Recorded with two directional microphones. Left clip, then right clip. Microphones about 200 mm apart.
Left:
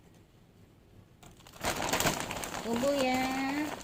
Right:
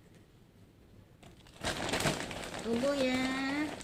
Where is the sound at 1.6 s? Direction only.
10° left (ahead or behind).